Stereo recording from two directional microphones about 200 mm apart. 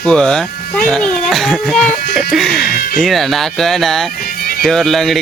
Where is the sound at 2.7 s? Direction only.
45° left (ahead or behind).